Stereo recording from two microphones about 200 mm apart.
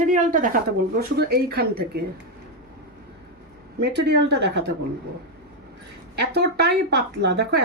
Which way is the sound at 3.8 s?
60° right (ahead or behind).